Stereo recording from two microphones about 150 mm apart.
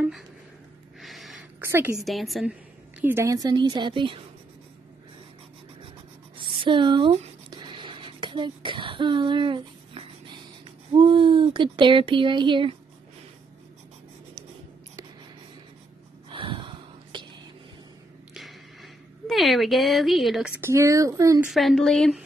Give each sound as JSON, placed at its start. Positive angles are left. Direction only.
{"t": 1.0, "sound": "gasp", "side_deg": 0}
{"t": 1.6, "sound": "a woman's voice", "side_deg": -15}
{"t": 2.0, "sound": "a woman's voice", "side_deg": 0}
{"t": 3.0, "sound": "a woman's voice", "side_deg": -15}
{"t": 6.3, "sound": "writing", "side_deg": -35}
{"t": 10.6, "sound": "a sound", "side_deg": -35}
{"t": 16.3, "sound": "a sound", "side_deg": -35}
{"t": 18.3, "sound": "a sound", "side_deg": 0}
{"t": 20.6, "sound": "a woman's voice", "side_deg": -20}
{"t": 21.5, "sound": "a woman's voice", "side_deg": 0}